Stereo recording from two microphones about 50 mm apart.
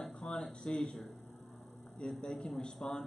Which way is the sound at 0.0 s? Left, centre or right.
Centre.